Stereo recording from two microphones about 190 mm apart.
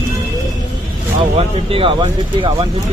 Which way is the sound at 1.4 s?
30° right (ahead or behind).